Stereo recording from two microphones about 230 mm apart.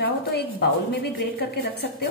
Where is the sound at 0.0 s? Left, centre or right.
Left.